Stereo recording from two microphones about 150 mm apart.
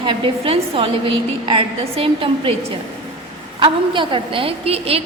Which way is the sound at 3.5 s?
35° right (ahead or behind).